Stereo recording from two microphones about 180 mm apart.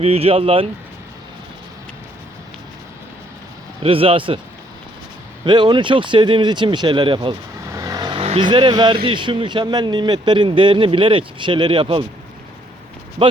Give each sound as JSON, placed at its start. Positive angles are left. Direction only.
{"t": 0.0, "sound": "speech", "side_deg": -35}
{"t": 3.8, "sound": "a man's voice", "side_deg": -30}
{"t": 5.5, "sound": "a man's voice", "side_deg": -25}
{"t": 7.7, "sound": "vehicle", "side_deg": -20}
{"t": 9.0, "sound": "a man's voice", "side_deg": -25}